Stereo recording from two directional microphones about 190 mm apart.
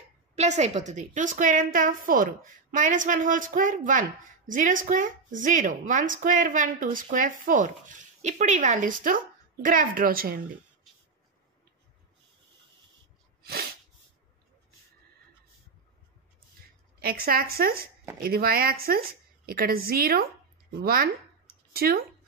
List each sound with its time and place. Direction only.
0.4 s a woman's voice: 35° right (ahead or behind)
17.0 s a woman's voice: 50° right (ahead or behind)